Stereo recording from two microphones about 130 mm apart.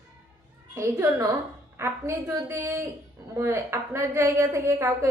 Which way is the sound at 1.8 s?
20° right (ahead or behind).